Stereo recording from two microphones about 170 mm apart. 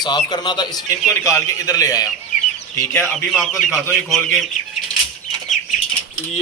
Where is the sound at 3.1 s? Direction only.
Centre (ahead or behind).